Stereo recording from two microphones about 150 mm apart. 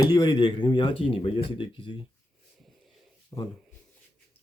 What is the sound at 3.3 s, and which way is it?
Speech, 20° left (ahead or behind).